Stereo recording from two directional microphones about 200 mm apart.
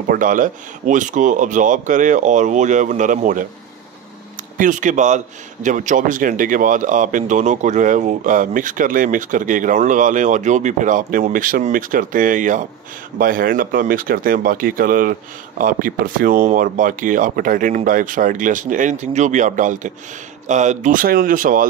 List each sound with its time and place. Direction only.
0.1 s a man's voice: 40° right (ahead or behind)
4.6 s a man's voice: 40° right (ahead or behind)